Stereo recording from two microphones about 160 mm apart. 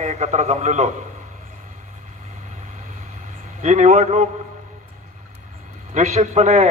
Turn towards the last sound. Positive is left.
turn(degrees=-45)  # may be behind; listen again after turning